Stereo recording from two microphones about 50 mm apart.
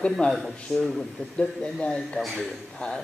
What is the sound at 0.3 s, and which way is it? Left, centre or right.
Speech, centre.